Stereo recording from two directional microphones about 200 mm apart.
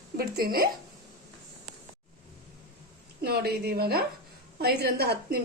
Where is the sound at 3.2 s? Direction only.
50° right (ahead or behind).